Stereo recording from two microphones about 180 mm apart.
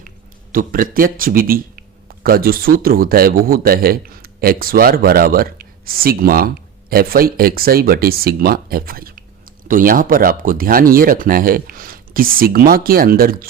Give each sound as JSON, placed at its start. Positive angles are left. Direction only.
{"t": 0.5, "sound": "a man's voice", "side_deg": -50}